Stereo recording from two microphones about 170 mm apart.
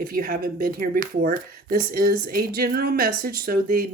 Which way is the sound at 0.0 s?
55° right (ahead or behind).